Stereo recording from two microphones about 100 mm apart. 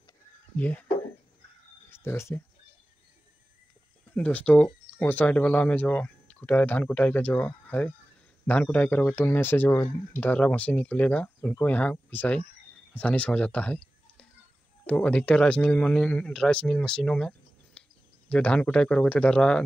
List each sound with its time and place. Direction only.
0.6 s speech: 15° left (ahead or behind)
1.9 s speech: 25° left (ahead or behind)
4.1 s speech: 15° left (ahead or behind)